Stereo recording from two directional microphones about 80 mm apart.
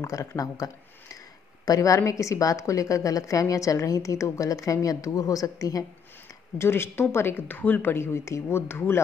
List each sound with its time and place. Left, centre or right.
0.0 s a woman's voice: left
1.7 s a woman's voice: left
6.6 s speech: left